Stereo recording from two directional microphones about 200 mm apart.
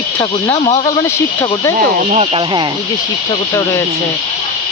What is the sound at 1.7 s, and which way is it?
Speech, 30° right (ahead or behind).